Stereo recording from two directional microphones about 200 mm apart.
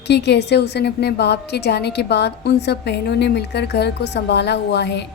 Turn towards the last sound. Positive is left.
turn(degrees=60)  # may be behind; listen again after turning